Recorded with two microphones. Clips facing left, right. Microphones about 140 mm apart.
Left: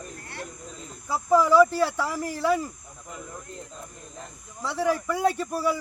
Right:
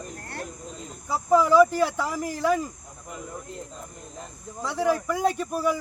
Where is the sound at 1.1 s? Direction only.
10° right (ahead or behind).